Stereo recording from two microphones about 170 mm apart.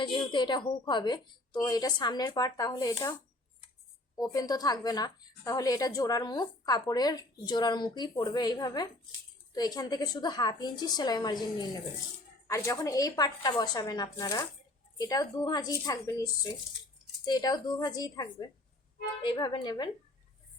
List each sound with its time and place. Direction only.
0.0 s a woman's voice: 30° left (ahead or behind)
4.1 s a woman's voice: 20° left (ahead or behind)